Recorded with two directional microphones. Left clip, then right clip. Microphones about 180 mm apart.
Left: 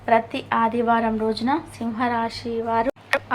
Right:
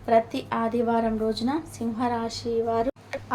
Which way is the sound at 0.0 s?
10° left (ahead or behind).